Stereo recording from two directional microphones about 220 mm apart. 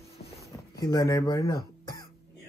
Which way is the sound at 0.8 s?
15° left (ahead or behind).